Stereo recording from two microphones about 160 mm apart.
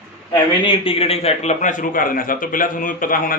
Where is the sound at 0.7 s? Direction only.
35° left (ahead or behind).